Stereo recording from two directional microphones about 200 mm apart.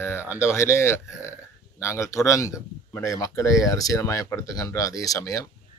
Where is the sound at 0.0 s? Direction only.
10° left (ahead or behind).